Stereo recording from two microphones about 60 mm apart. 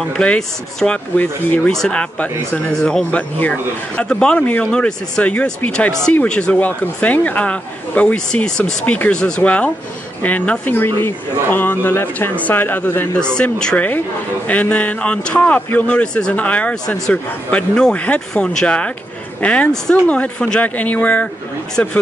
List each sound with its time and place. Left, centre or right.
0.8 s speech: centre
1.7 s speech: centre
2.0 s speech: centre
3.1 s speech: left
6.6 s speech: left
8.3 s speech: centre
8.8 s speech: left
10.7 s speech: left
12.4 s speech: left
13.2 s speech: centre
14.5 s speech: left